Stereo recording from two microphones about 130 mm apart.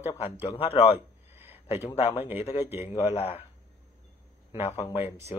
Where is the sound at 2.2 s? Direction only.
15° right (ahead or behind).